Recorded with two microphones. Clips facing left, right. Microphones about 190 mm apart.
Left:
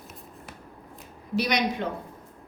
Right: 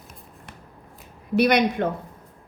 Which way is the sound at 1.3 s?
55° right (ahead or behind).